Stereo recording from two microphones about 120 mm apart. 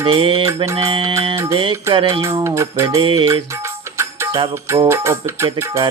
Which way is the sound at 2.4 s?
25° right (ahead or behind).